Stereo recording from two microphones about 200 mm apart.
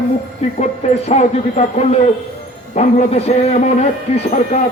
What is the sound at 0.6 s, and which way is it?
A man's voice, 35° left (ahead or behind).